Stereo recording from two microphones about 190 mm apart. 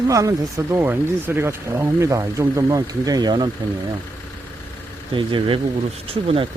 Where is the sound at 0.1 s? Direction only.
15° right (ahead or behind).